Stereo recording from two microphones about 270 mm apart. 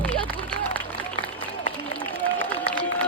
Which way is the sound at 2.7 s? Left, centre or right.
Centre.